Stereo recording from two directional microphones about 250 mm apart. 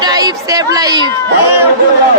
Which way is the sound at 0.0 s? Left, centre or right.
Centre.